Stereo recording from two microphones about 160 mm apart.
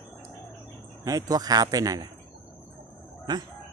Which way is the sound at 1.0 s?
25° right (ahead or behind).